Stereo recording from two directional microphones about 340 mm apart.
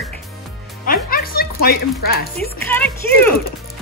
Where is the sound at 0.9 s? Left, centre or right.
Left.